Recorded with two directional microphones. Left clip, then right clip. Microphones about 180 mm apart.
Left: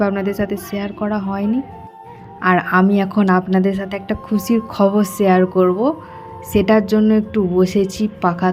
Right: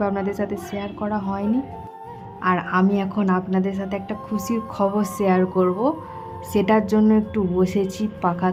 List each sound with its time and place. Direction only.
0.0 s a woman's voice: 20° left (ahead or behind)